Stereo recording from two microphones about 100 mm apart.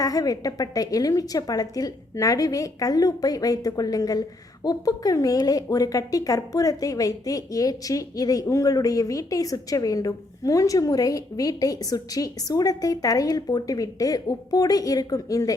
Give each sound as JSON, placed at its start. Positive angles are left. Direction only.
{"t": 0.0, "sound": "a woman's voice", "side_deg": 35}